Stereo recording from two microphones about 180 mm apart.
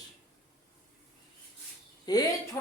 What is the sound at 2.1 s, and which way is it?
Speech, 20° left (ahead or behind).